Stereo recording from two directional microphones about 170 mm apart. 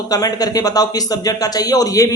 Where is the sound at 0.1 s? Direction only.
20° left (ahead or behind).